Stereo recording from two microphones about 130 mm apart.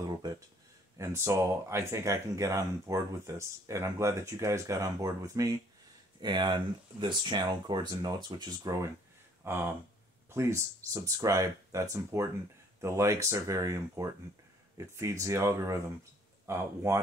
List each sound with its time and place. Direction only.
0.0 s a sound: 25° right (ahead or behind)
0.9 s speech: 20° right (ahead or behind)
9.5 s speech: 20° right (ahead or behind)